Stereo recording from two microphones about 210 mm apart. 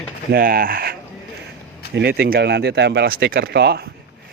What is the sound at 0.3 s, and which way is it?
Speech, 45° right (ahead or behind).